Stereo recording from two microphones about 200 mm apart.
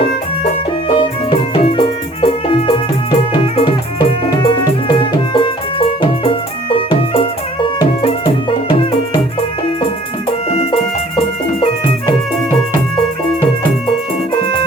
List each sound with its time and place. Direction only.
0.9 s music: 30° left (ahead or behind)
10.5 s music: 30° left (ahead or behind)